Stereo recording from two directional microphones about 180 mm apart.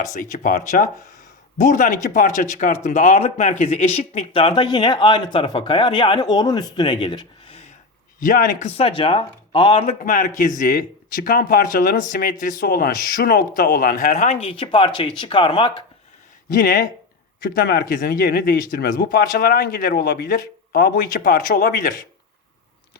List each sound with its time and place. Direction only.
0.1 s speech: 45° left (ahead or behind)
8.2 s speech: 45° left (ahead or behind); by 9.9 s 30° left (ahead or behind)
10.0 s speech: 45° left (ahead or behind); by 15.8 s 25° left (ahead or behind)
16.6 s speech: 50° left (ahead or behind)